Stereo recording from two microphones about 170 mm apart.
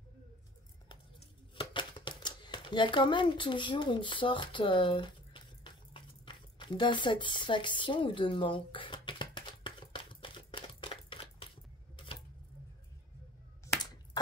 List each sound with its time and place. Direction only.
1.6 s typewriter: 30° left (ahead or behind)